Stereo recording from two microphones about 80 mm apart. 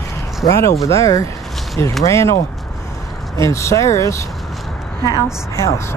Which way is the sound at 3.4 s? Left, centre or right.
Left.